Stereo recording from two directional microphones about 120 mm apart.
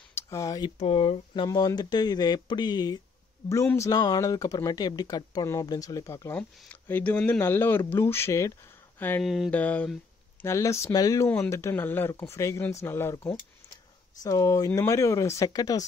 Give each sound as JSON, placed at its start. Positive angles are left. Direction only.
{"t": 0.1, "sound": "a sound", "side_deg": 25}
{"t": 0.7, "sound": "speech", "side_deg": 55}
{"t": 1.5, "sound": "speech", "side_deg": 35}
{"t": 9.2, "sound": "a sound", "side_deg": 0}
{"t": 9.5, "sound": "speech", "side_deg": 10}
{"t": 10.4, "sound": "speech", "side_deg": 25}
{"t": 14.2, "sound": "speech", "side_deg": 30}